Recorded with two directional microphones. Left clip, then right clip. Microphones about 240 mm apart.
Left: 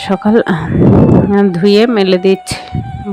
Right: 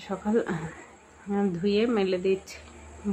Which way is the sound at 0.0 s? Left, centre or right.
Left.